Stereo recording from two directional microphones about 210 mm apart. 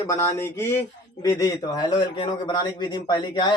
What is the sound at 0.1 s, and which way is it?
A man's voice, 10° left (ahead or behind).